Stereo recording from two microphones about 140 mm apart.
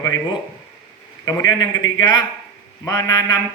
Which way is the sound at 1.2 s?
25° left (ahead or behind).